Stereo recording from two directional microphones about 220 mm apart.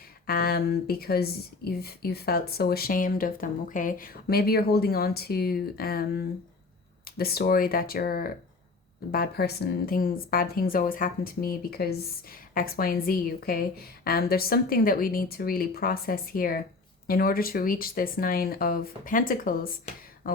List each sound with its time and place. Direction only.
0.3 s speech: 45° left (ahead or behind)